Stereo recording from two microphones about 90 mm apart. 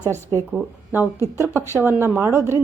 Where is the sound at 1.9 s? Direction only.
25° right (ahead or behind).